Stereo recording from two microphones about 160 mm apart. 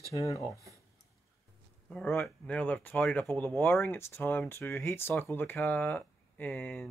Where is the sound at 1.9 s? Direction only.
5° left (ahead or behind).